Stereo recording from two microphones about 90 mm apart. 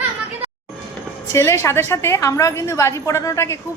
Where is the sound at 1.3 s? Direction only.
35° left (ahead or behind).